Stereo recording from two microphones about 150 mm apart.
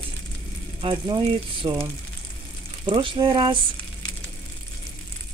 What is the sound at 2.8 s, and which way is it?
Speech, 35° right (ahead or behind).